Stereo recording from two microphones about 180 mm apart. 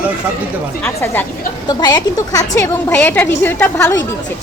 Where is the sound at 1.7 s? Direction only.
20° left (ahead or behind).